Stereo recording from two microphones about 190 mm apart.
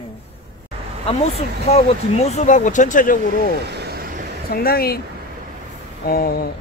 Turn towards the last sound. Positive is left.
turn(degrees=55)  # may be behind; listen again after turning